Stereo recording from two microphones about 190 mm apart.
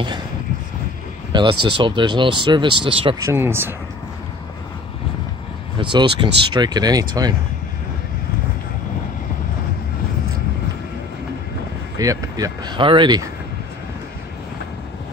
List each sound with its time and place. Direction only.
1.3 s speech: 25° right (ahead or behind)
3.2 s speech: 15° right (ahead or behind)
5.8 s speech: 25° right (ahead or behind)
12.0 s speech: 20° right (ahead or behind)